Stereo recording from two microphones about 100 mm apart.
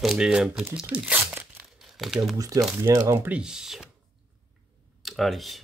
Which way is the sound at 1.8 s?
5° right (ahead or behind).